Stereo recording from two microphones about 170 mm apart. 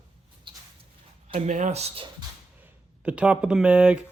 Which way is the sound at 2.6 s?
10° right (ahead or behind).